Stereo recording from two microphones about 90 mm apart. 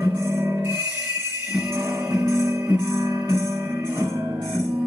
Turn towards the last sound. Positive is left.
turn(degrees=-30)  # may be behind; listen again after turning